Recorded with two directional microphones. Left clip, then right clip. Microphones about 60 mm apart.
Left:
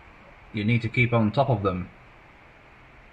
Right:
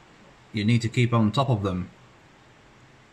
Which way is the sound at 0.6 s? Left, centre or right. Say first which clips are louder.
Left 1 dB; right.